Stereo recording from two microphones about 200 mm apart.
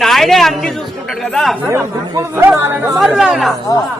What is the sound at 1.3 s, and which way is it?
Music, centre (ahead or behind).